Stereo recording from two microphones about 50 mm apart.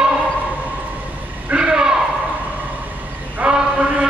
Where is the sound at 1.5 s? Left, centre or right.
Centre.